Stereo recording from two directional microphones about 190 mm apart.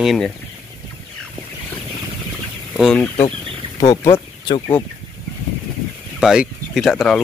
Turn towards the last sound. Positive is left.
turn(degrees=0)  # may be behind; listen again after turning